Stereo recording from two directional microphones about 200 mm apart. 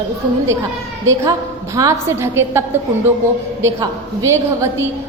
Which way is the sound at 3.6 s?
15° right (ahead or behind).